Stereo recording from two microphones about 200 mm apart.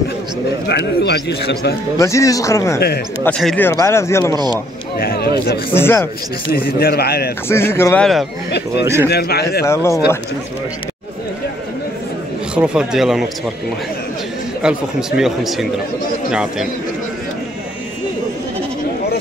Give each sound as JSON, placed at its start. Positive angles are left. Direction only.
{"t": 0.7, "sound": "speech", "side_deg": 55}
{"t": 2.0, "sound": "speech", "side_deg": 15}
{"t": 4.9, "sound": "speech", "side_deg": 50}
{"t": 5.7, "sound": "speech", "side_deg": 10}
{"t": 6.5, "sound": "speech", "side_deg": 50}
{"t": 7.4, "sound": "speech", "side_deg": 10}
{"t": 8.5, "sound": "speech", "side_deg": 55}
{"t": 8.8, "sound": "speech", "side_deg": -15}
{"t": 9.1, "sound": "speech", "side_deg": 50}
{"t": 12.5, "sound": "speech", "side_deg": -5}
{"t": 14.6, "sound": "speech", "side_deg": -5}